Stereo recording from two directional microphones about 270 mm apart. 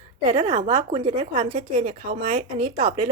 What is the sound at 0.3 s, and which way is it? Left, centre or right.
A woman's voice, right.